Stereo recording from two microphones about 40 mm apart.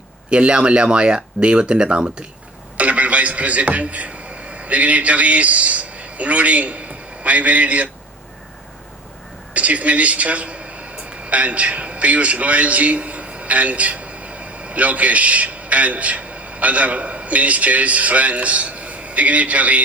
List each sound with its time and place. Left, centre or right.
0.3 s a man's voice: right
9.6 s speech: right